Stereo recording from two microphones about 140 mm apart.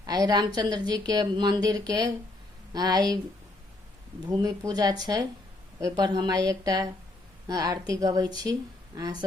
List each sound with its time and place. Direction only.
0.0 s a woman's voice: 30° right (ahead or behind)
4.3 s a woman's voice: 25° right (ahead or behind)